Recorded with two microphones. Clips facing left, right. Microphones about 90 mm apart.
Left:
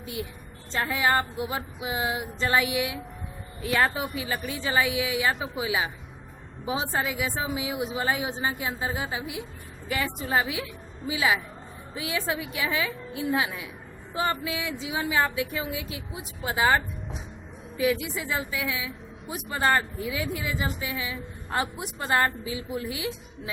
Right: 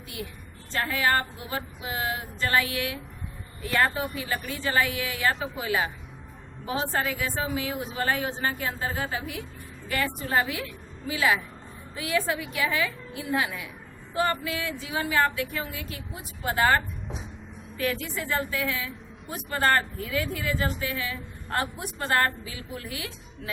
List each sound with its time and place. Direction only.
0.7 s a woman's voice: 20° left (ahead or behind)